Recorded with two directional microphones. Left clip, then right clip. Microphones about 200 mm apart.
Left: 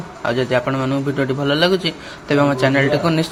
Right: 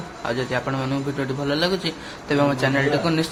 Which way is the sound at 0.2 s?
20° left (ahead or behind).